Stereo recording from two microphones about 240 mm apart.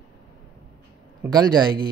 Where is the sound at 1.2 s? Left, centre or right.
Centre.